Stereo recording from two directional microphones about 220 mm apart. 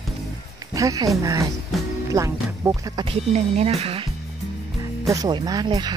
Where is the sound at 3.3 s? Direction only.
30° right (ahead or behind).